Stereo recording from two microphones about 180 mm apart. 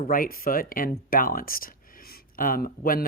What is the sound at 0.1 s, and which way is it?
Speech, 55° left (ahead or behind).